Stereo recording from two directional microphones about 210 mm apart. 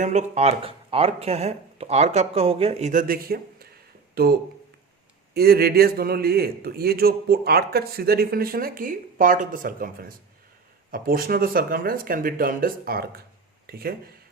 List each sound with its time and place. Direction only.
0.0 s a man's voice: 35° right (ahead or behind)